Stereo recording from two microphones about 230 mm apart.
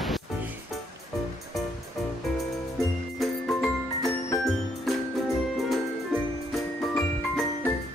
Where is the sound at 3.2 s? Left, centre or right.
Centre.